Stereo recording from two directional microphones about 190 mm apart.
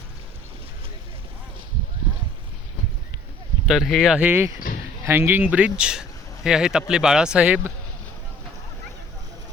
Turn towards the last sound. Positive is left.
turn(degrees=-5)  # may be behind; listen again after turning